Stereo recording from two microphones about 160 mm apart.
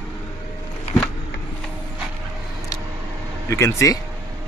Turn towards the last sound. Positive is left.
turn(degrees=20)  # may be behind; listen again after turning